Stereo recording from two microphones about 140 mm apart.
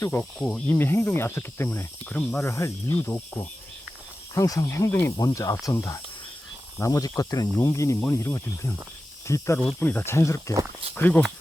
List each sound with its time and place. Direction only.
0.0 s speech: 15° left (ahead or behind)
0.3 s speech: 5° left (ahead or behind)
0.7 s speech: 15° left (ahead or behind)
9.6 s speech: 10° left (ahead or behind)